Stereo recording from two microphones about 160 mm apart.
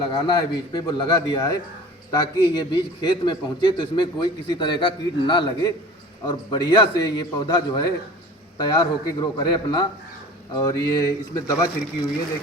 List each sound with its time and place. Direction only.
0.0 s a man's voice: 30° left (ahead or behind)